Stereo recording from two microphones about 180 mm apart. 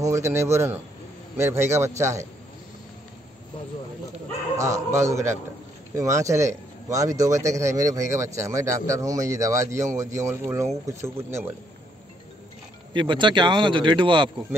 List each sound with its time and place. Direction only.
0.0 s speech: 15° right (ahead or behind)
4.6 s speech: 15° right (ahead or behind)
12.9 s speech: 25° right (ahead or behind)